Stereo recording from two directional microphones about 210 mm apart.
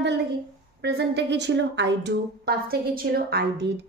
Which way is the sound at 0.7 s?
50° right (ahead or behind).